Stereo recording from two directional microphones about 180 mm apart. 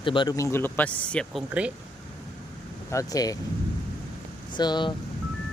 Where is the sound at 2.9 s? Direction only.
20° left (ahead or behind).